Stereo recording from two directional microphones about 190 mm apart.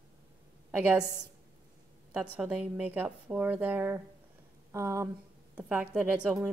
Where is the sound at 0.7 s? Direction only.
5° right (ahead or behind).